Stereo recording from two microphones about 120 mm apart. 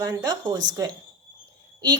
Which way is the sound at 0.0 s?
30° right (ahead or behind).